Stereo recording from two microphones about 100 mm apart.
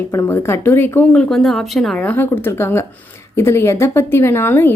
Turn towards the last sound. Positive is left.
turn(degrees=20)  # may be behind; listen again after turning